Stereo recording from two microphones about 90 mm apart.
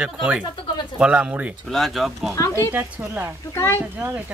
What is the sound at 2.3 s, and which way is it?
Speech, 35° left (ahead or behind).